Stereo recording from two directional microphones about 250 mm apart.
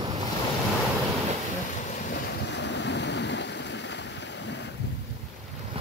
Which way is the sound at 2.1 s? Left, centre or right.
Left.